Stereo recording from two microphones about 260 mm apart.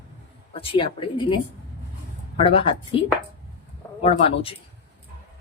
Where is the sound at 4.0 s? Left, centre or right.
Left.